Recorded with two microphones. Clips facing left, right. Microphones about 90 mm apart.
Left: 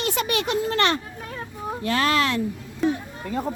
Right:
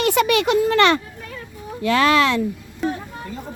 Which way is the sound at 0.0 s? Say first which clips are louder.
Right 7 dB; 70° right (ahead or behind).